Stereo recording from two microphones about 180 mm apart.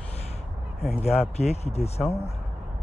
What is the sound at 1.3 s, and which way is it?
Speech, 35° left (ahead or behind).